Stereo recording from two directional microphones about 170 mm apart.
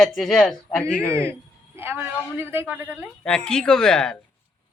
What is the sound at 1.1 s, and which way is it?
A woman's voice, 15° right (ahead or behind).